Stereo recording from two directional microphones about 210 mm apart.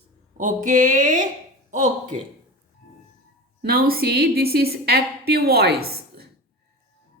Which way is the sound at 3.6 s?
45° right (ahead or behind).